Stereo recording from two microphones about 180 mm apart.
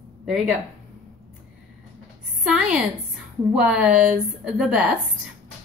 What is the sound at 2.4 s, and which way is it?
Speech, 5° right (ahead or behind).